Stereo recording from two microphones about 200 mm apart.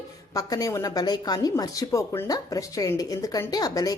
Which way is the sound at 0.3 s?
15° left (ahead or behind).